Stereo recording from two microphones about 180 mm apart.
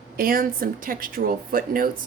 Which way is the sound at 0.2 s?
50° right (ahead or behind).